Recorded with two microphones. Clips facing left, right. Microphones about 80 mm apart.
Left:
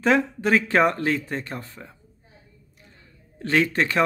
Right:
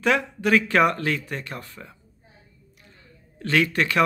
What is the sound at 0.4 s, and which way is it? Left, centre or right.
Speech, left.